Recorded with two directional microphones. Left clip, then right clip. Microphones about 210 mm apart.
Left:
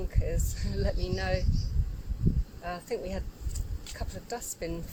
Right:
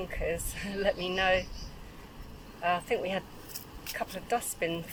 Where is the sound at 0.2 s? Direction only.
40° left (ahead or behind).